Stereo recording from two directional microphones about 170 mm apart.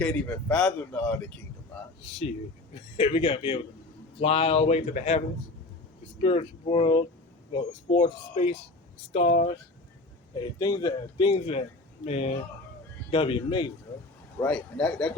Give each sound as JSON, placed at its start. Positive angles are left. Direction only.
{"t": 0.0, "sound": "speech", "side_deg": 10}
{"t": 3.0, "sound": "speech", "side_deg": 30}
{"t": 6.2, "sound": "speech", "side_deg": 35}
{"t": 10.6, "sound": "a man's voice", "side_deg": 25}
{"t": 14.4, "sound": "speech", "side_deg": 5}